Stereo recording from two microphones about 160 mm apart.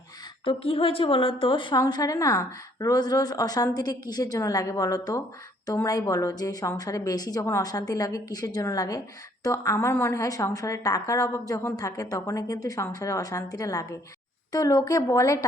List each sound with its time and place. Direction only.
0.4 s a woman's voice: 35° left (ahead or behind); by 15.4 s 20° left (ahead or behind)